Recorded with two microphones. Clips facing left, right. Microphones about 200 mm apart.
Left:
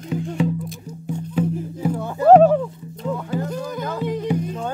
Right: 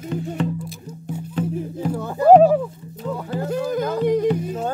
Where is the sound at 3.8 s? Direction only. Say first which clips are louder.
Right 7 dB; 45° right (ahead or behind).